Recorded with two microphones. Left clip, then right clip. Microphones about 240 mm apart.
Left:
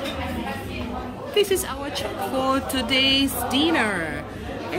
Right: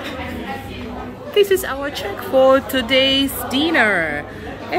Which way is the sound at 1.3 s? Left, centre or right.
Centre.